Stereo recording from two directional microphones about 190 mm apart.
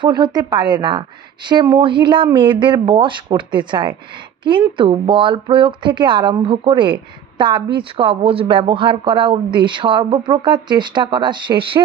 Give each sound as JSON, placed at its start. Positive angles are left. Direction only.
{"t": 0.0, "sound": "speech", "side_deg": -25}